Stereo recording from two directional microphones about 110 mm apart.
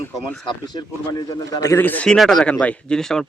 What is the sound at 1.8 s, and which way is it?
Speech, 15° left (ahead or behind).